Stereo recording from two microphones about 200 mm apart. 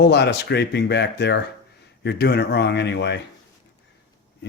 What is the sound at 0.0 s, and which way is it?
Speech, 60° left (ahead or behind).